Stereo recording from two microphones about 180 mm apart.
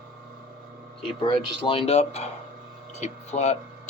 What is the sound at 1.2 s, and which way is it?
Speech, 30° left (ahead or behind).